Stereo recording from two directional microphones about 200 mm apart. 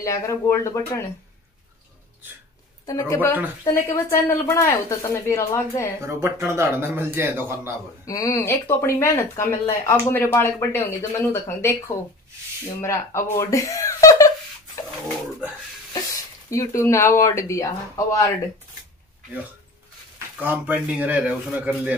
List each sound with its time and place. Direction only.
0.0 s speech: 15° left (ahead or behind)
2.9 s speech: 15° left (ahead or behind)
5.9 s a man's voice: 15° right (ahead or behind)
8.1 s speech: 15° left (ahead or behind)
16.4 s speech: 15° left (ahead or behind)
20.4 s a man's voice: 10° right (ahead or behind)